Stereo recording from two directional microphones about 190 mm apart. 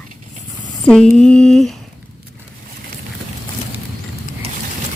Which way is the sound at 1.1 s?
5° left (ahead or behind).